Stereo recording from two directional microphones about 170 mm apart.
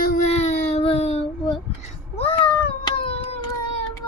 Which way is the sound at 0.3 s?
40° left (ahead or behind).